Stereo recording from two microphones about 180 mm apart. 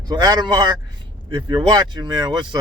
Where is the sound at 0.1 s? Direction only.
20° right (ahead or behind).